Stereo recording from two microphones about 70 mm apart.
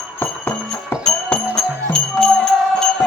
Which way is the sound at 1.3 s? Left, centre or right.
Centre.